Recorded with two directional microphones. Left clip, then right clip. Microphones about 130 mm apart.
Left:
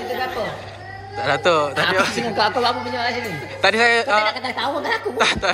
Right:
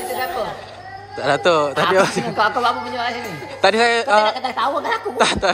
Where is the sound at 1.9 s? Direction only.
45° right (ahead or behind).